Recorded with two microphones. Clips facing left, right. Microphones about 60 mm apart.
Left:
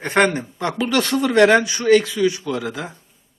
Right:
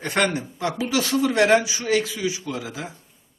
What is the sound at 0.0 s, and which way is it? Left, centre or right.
Speech, left.